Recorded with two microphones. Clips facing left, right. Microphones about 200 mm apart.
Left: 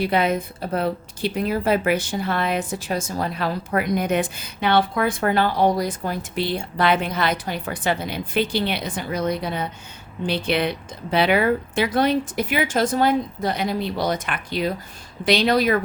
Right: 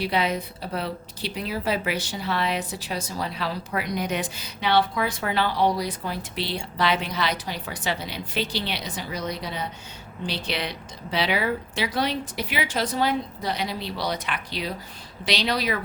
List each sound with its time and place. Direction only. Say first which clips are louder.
0.0 s a woman's voice: left 4 dB; 50° left (ahead or behind)